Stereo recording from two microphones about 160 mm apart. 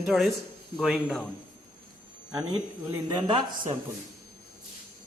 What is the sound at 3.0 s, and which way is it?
Speech, 25° right (ahead or behind).